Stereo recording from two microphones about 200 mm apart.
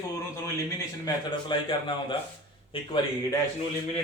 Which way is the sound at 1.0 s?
25° left (ahead or behind).